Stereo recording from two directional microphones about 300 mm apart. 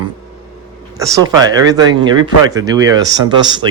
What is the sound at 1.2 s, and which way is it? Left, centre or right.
Speech, centre.